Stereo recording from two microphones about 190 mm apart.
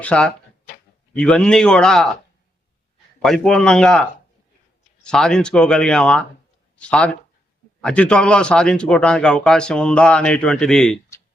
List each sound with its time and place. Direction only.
0.0 s a man's voice: 5° left (ahead or behind)
3.2 s a man's voice: 5° left (ahead or behind)
5.0 s a man's voice: 5° left (ahead or behind)